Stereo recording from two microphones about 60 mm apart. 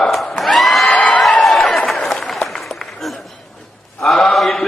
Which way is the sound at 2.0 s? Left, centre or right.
Centre.